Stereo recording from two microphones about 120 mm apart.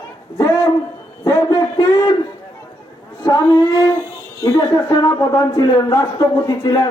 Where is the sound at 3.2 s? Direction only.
30° left (ahead or behind).